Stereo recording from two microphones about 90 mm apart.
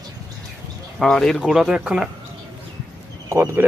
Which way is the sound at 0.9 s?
5° left (ahead or behind).